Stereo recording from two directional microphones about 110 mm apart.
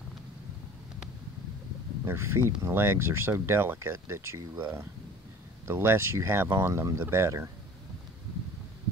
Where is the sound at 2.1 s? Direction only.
25° right (ahead or behind).